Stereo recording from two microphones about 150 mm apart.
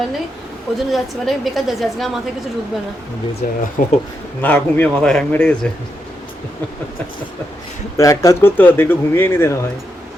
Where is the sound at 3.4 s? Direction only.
70° left (ahead or behind).